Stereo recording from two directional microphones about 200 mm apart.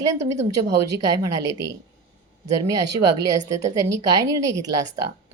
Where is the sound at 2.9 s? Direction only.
15° right (ahead or behind).